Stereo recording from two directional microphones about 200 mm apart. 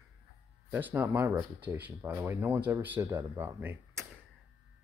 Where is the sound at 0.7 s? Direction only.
10° right (ahead or behind).